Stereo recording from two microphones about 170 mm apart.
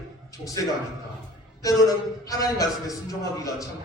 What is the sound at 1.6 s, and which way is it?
A man's voice, 20° left (ahead or behind).